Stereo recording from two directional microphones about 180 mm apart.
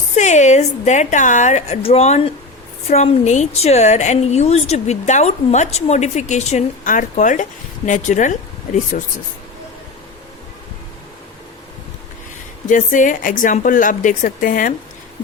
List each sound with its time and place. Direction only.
0.2 s a woman's voice: 40° left (ahead or behind)
12.6 s speech: 45° left (ahead or behind)